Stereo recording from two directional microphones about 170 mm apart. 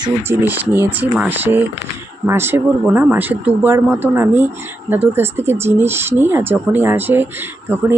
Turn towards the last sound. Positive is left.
turn(degrees=-10)  # may be behind; listen again after turning